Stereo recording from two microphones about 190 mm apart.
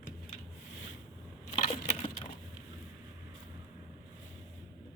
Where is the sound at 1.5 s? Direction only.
35° left (ahead or behind).